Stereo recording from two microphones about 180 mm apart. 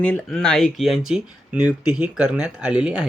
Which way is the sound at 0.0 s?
5° left (ahead or behind).